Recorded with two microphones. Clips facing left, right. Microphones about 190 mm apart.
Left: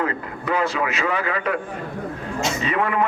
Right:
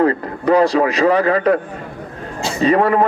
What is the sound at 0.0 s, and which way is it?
A man's voice, 40° right (ahead or behind).